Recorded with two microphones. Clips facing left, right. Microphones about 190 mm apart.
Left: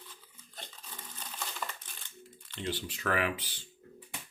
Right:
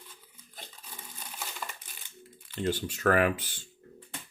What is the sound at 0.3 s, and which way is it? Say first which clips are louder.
Crumpling: even; 10° right (ahead or behind).